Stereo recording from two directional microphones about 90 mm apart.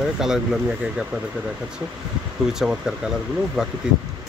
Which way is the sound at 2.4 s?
5° right (ahead or behind).